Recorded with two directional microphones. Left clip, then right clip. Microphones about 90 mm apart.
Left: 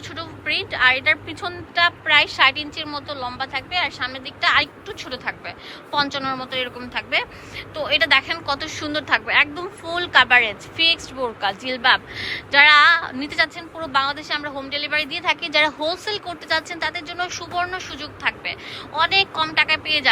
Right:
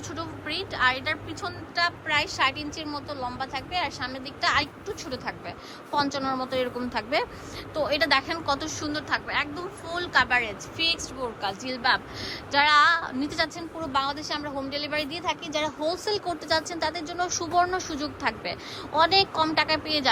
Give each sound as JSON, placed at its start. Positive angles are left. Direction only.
{"t": 0.4, "sound": "a woman's voice", "side_deg": -25}
{"t": 6.4, "sound": "a woman's voice", "side_deg": -55}
{"t": 7.8, "sound": "a woman's voice", "side_deg": -40}
{"t": 8.8, "sound": "a woman's voice", "side_deg": -15}
{"t": 13.1, "sound": "a woman's voice", "side_deg": -35}
{"t": 15.2, "sound": "a woman's voice", "side_deg": -25}
{"t": 16.0, "sound": "a woman's voice", "side_deg": -45}